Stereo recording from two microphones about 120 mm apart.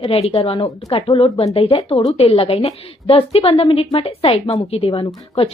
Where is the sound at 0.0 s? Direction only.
55° left (ahead or behind).